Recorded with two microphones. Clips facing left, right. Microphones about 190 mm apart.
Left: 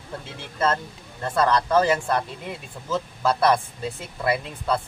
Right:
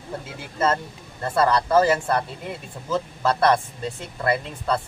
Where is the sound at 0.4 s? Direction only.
5° right (ahead or behind).